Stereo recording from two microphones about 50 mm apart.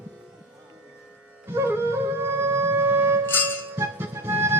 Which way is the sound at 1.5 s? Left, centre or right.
Right.